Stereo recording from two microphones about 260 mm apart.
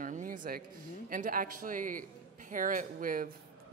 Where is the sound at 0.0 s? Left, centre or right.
Right.